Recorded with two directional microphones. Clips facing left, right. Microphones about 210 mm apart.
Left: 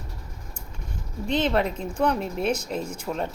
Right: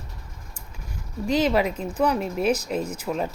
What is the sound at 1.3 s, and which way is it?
A woman's voice, 5° right (ahead or behind).